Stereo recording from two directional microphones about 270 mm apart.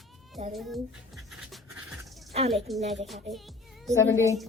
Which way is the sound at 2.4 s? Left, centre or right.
Right.